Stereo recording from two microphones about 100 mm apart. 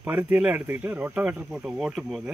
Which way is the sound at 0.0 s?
20° right (ahead or behind).